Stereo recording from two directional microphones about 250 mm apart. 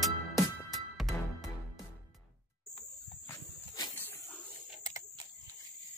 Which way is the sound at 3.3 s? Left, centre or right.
Centre.